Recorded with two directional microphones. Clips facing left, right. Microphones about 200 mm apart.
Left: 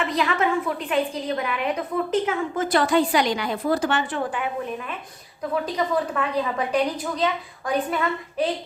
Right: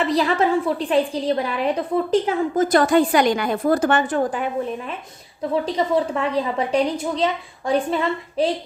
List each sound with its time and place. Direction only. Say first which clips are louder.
0.0 s a woman's voice: right 4 dB; 35° right (ahead or behind)
5.4 s a woman's voice: right 3 dB; 25° right (ahead or behind)